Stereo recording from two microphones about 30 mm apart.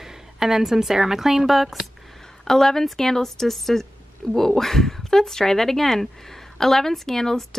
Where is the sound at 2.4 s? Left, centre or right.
Centre.